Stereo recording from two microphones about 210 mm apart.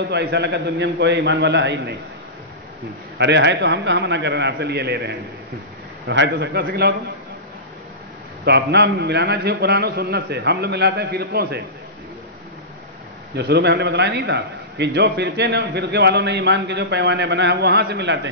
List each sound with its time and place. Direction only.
0.1 s a man's voice: 55° right (ahead or behind)
3.2 s a man's voice: 55° right (ahead or behind)
8.5 s a man's voice: 55° right (ahead or behind)
13.3 s a man's voice: 55° right (ahead or behind)